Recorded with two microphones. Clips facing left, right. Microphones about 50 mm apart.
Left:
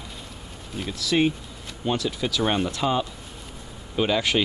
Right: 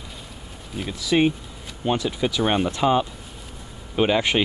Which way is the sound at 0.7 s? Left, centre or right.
Centre.